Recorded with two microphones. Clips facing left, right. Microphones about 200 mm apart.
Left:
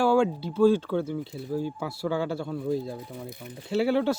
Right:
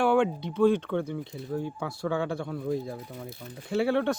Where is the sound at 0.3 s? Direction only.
5° left (ahead or behind).